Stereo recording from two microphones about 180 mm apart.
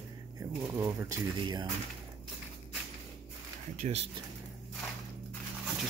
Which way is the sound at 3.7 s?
35° right (ahead or behind).